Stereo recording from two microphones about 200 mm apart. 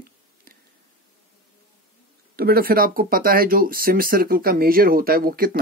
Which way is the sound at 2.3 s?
50° right (ahead or behind).